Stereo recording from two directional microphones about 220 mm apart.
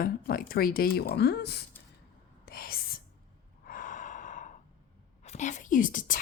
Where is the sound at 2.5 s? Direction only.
45° left (ahead or behind).